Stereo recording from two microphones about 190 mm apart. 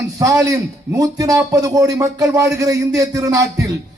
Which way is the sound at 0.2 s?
15° right (ahead or behind).